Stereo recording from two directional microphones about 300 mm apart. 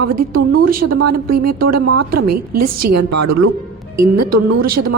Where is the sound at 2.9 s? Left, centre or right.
Right.